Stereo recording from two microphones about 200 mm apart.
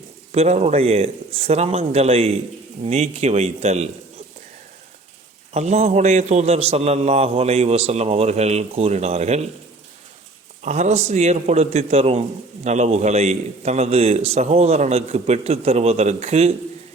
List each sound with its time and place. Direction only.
0.3 s a man's voice: 35° right (ahead or behind)
5.5 s a man's voice: 35° right (ahead or behind)
10.6 s a man's voice: 35° right (ahead or behind)